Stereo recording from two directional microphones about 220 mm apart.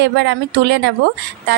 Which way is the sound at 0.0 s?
50° right (ahead or behind).